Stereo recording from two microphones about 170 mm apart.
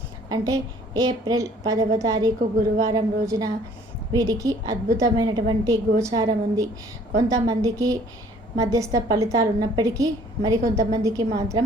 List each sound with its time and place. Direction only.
0.3 s a woman's voice: 20° right (ahead or behind)